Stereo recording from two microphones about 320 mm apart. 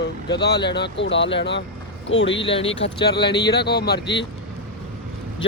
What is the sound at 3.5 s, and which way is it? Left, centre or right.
Speech, left.